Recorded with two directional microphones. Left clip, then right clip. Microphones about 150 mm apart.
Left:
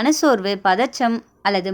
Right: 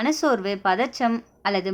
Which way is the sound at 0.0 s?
30° left (ahead or behind).